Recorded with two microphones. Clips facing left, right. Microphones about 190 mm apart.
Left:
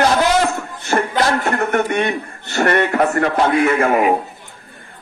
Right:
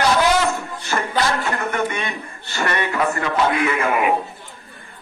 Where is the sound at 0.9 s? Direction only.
50° left (ahead or behind).